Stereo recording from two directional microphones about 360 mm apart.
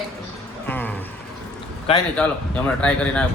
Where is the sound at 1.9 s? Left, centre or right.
Centre.